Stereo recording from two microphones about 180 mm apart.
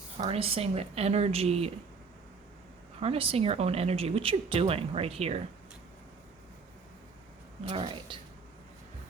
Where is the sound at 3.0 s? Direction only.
30° right (ahead or behind).